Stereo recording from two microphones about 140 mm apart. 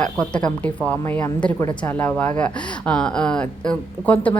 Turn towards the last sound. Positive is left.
turn(degrees=10)  # may be behind; listen again after turning